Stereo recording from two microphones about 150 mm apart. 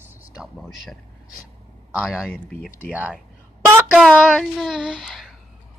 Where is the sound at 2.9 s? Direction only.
10° right (ahead or behind).